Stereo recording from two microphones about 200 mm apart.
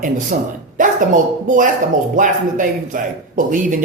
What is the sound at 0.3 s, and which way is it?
A man's voice, 45° right (ahead or behind).